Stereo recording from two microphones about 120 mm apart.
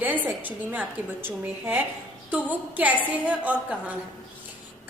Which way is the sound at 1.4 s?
15° right (ahead or behind).